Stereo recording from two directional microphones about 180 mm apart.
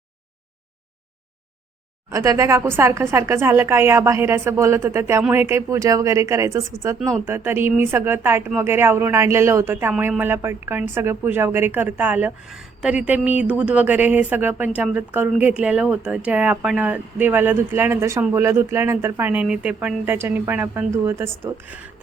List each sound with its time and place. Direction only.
2.0 s speech: 15° right (ahead or behind)